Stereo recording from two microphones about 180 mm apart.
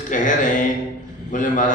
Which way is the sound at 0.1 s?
45° left (ahead or behind).